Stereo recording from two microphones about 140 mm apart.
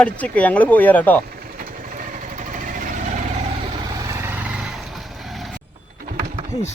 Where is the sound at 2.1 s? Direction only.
65° right (ahead or behind).